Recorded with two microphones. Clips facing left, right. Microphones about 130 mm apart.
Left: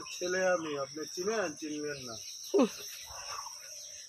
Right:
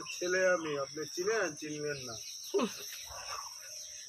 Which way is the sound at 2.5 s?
35° left (ahead or behind).